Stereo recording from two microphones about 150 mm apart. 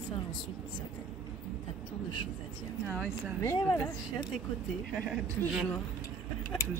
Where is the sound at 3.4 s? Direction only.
15° left (ahead or behind).